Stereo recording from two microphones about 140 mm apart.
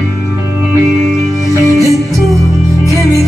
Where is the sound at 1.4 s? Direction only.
25° right (ahead or behind).